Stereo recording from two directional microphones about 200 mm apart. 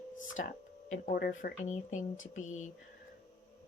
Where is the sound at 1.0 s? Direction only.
45° left (ahead or behind).